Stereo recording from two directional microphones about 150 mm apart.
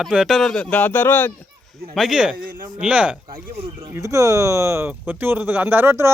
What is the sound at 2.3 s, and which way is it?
Speech, 70° right (ahead or behind).